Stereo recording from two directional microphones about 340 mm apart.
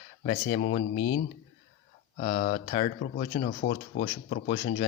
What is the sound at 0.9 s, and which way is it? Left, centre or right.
Speech, left.